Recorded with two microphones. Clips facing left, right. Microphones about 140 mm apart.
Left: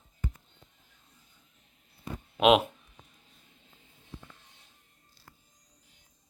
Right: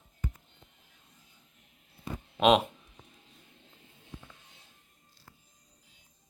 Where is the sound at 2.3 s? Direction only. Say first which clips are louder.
Left 1 dB; 5° left (ahead or behind).